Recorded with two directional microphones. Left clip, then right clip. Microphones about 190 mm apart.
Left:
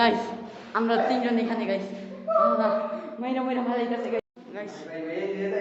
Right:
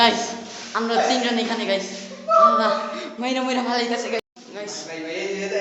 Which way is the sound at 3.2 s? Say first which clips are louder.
Right 5 dB; 35° right (ahead or behind).